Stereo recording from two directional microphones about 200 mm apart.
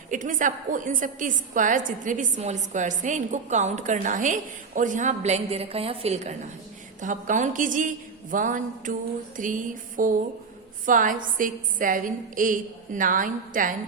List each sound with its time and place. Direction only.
0.1 s a woman's voice: 40° right (ahead or behind)